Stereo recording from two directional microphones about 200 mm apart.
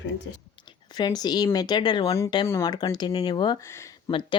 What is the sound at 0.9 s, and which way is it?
Speech, 20° left (ahead or behind).